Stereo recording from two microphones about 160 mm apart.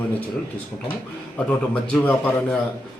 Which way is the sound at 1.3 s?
10° left (ahead or behind).